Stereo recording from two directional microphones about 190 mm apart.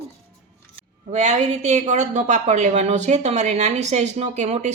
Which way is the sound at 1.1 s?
35° right (ahead or behind).